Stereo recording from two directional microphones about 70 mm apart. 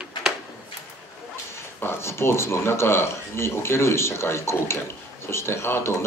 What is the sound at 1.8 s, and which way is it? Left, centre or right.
Speech, left.